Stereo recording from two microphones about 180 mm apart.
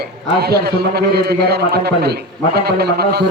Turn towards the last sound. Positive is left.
turn(degrees=-60)  # may be behind; listen again after turning